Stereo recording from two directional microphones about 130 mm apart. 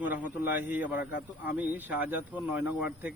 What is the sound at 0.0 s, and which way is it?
Speech, 15° right (ahead or behind).